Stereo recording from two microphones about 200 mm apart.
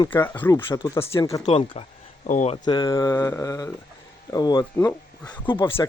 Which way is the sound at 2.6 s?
20° left (ahead or behind).